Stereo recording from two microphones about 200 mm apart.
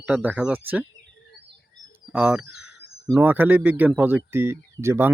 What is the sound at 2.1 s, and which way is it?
Speech, 5° right (ahead or behind).